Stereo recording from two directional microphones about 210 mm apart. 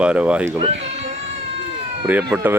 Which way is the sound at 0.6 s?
30° right (ahead or behind).